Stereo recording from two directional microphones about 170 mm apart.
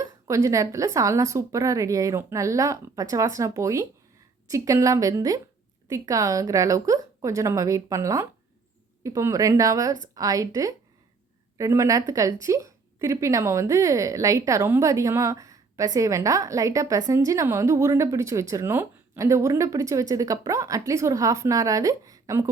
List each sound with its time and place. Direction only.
0.0 s a woman's voice: 20° right (ahead or behind)